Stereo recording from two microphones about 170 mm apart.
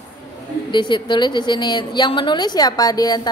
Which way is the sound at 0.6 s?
25° left (ahead or behind).